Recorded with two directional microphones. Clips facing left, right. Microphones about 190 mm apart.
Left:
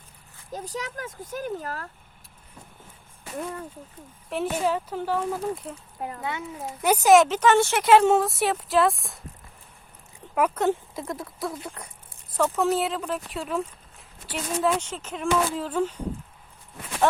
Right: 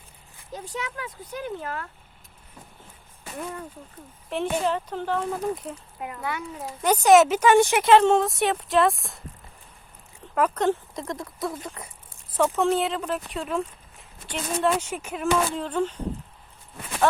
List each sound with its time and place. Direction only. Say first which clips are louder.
0.5 s speech: left 1 dB; 40° left (ahead or behind)
4.3 s speech: even; 5° left (ahead or behind)
6.2 s a child's voice: right 3 dB; 25° left (ahead or behind)
6.8 s speech: right 1 dB; 5° left (ahead or behind)
7.3 s speech: right 2 dB; 10° right (ahead or behind)
7.8 s speech: even; 10° left (ahead or behind)
10.3 s speech: even; 10° left (ahead or behind)
14.8 s speech: right 2 dB; 10° right (ahead or behind); by 16.0 s 10° left (ahead or behind)